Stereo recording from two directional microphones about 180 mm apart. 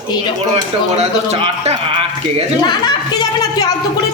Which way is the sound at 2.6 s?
25° left (ahead or behind).